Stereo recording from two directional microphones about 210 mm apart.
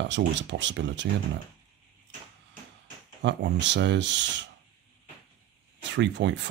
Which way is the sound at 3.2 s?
60° right (ahead or behind).